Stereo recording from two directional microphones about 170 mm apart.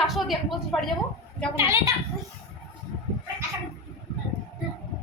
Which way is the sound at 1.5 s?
15° right (ahead or behind).